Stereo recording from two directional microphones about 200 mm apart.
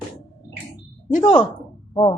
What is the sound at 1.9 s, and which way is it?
Music, 20° left (ahead or behind).